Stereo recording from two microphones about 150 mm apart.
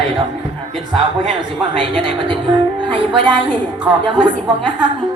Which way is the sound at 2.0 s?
30° right (ahead or behind).